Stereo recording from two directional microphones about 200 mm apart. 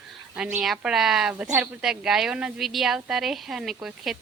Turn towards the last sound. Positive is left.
turn(degrees=0)  # may be behind; listen again after turning